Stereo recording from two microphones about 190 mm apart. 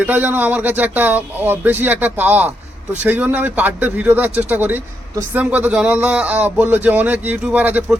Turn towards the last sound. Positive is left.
turn(degrees=-10)  # may be behind; listen again after turning